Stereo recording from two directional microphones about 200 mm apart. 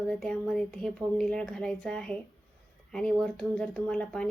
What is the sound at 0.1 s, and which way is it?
Speech, 5° left (ahead or behind).